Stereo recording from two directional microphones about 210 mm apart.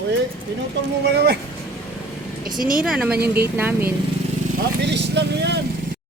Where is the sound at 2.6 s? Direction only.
40° right (ahead or behind).